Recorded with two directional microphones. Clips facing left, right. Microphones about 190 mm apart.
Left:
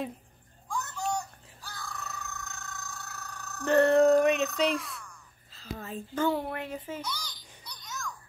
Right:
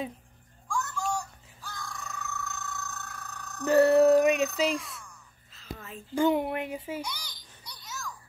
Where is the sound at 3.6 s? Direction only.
10° right (ahead or behind).